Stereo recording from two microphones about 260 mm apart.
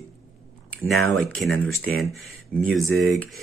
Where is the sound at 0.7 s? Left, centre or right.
Centre.